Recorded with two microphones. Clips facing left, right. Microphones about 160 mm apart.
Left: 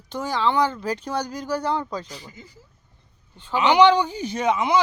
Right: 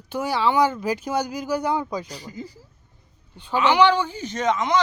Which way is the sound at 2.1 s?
40° right (ahead or behind).